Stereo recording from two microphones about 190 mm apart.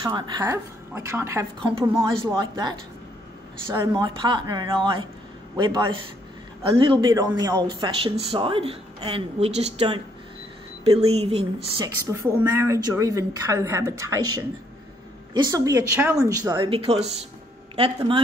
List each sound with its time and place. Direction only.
0.0 s a woman's voice: 25° right (ahead or behind)
3.7 s a woman's voice: 25° right (ahead or behind)
12.1 s a woman's voice: 15° right (ahead or behind)
15.3 s speech: 20° right (ahead or behind)